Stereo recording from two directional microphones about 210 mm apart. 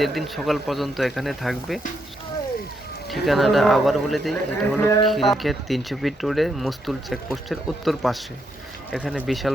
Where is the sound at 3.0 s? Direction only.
Centre (ahead or behind).